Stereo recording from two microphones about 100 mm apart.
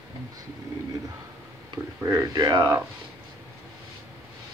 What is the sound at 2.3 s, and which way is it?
Speech, 40° right (ahead or behind).